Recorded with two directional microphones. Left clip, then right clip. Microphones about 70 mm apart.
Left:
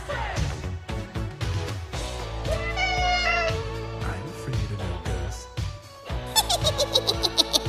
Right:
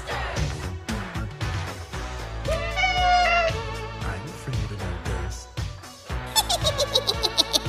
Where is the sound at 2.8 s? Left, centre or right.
Right.